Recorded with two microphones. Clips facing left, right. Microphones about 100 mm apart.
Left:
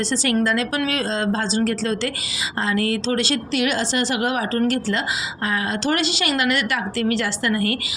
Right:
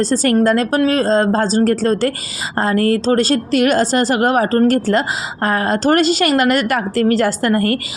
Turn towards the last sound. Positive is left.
turn(degrees=-45)  # may be behind; listen again after turning